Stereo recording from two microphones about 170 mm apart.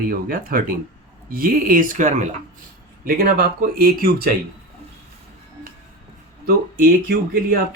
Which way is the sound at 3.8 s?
65° right (ahead or behind).